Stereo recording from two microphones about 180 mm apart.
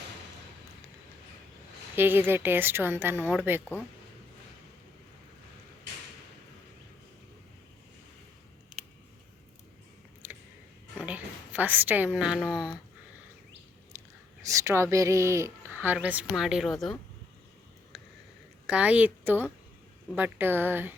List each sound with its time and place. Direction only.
2.0 s speech: 10° right (ahead or behind)
10.9 s a woman's voice: 5° right (ahead or behind)
14.4 s a woman's voice: 15° right (ahead or behind); by 17.0 s centre (ahead or behind)
18.6 s speech: 5° right (ahead or behind)